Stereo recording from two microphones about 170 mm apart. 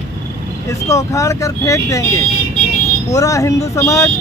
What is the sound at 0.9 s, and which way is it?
Speech, 20° left (ahead or behind).